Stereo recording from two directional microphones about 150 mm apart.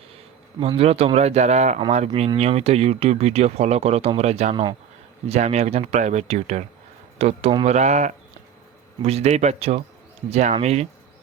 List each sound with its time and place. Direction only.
0.8 s speech: 40° right (ahead or behind)